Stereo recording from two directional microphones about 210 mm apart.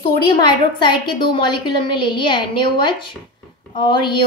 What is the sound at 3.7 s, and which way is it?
Speech, 20° left (ahead or behind).